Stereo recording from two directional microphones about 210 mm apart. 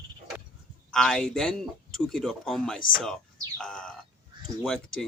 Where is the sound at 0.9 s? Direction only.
Centre (ahead or behind).